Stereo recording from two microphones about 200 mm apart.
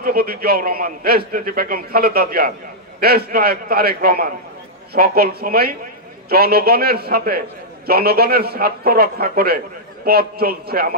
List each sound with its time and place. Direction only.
0.0 s a man's voice: 50° right (ahead or behind)